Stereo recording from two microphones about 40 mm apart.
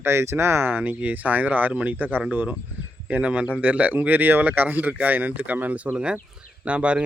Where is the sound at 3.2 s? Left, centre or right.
Right.